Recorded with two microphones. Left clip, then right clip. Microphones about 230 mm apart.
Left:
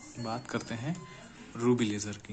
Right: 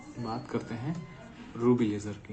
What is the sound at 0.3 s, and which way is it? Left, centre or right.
Speech, left.